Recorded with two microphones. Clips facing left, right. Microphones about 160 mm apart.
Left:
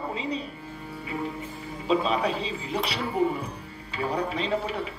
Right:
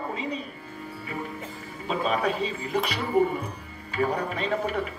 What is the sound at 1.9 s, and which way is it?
Music, 50° right (ahead or behind).